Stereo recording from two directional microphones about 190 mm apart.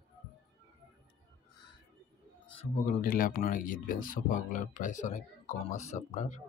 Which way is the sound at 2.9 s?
50° left (ahead or behind).